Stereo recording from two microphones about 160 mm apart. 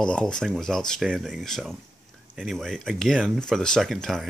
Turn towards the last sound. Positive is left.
turn(degrees=0)  # may be behind; listen again after turning